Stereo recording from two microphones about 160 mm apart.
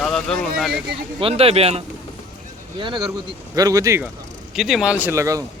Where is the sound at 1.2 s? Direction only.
40° right (ahead or behind); by 4.0 s 20° right (ahead or behind).